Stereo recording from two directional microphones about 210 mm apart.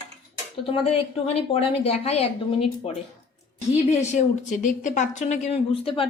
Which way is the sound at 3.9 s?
35° left (ahead or behind).